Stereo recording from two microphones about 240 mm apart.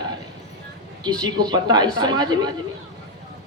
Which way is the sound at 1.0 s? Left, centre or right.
Centre.